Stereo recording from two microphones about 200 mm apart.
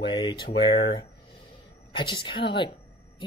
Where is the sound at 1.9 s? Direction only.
25° left (ahead or behind).